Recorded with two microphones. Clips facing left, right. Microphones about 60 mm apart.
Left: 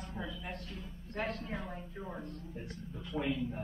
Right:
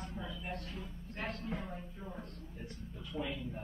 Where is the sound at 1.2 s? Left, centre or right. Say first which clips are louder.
Left 2 dB; left.